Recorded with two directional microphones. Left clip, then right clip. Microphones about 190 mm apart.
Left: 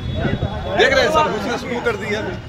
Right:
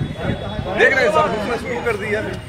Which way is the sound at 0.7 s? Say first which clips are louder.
Even; 45° left (ahead or behind).